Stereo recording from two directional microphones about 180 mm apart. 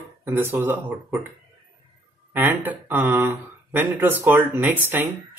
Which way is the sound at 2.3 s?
10° right (ahead or behind).